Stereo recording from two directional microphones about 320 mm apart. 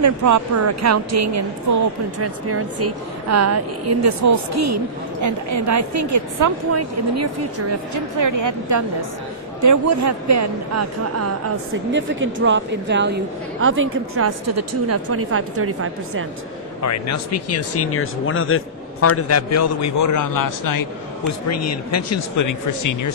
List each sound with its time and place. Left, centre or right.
0.0 s a woman's voice: right
11.9 s a woman's voice: right
16.8 s speech: left
21.3 s speech: left